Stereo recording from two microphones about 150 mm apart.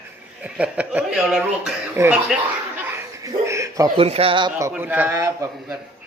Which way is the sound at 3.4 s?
20° right (ahead or behind).